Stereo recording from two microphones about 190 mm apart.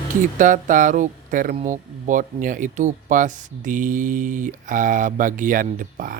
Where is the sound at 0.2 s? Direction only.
45° right (ahead or behind).